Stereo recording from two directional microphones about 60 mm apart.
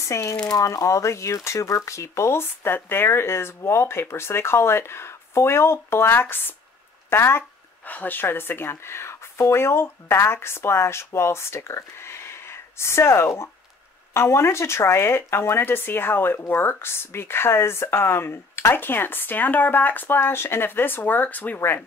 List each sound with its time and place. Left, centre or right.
0.0 s speech: left
7.8 s speech: left
21.5 s speech: left